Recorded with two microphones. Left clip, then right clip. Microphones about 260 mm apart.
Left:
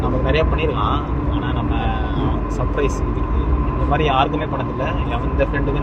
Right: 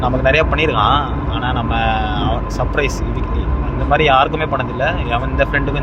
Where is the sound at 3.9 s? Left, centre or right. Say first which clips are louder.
Right 6 dB; right.